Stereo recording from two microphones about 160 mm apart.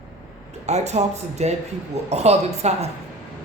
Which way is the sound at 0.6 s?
45° right (ahead or behind).